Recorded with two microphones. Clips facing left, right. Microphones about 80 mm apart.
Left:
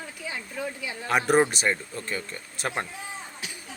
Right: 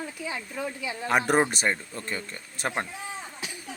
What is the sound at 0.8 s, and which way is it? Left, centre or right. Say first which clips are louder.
Speech: even; right.